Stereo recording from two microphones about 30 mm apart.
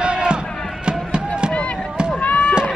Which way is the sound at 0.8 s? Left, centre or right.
Right.